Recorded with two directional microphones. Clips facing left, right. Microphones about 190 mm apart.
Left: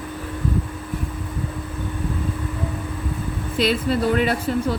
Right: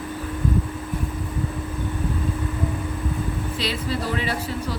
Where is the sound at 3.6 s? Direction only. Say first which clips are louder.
Left 9 dB; 55° left (ahead or behind).